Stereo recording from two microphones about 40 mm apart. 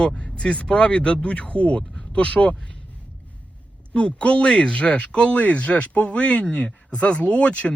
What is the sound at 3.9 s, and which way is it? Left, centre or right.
Speech, left.